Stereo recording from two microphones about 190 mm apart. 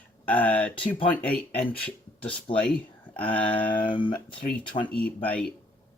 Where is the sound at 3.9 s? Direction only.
25° left (ahead or behind).